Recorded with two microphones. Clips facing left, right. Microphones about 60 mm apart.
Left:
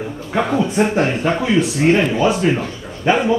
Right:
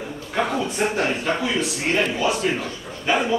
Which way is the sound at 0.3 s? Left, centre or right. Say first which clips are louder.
Left 5 dB; centre.